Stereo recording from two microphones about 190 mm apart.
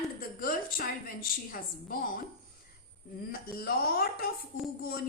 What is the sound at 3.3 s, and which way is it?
A woman's voice, 50° left (ahead or behind).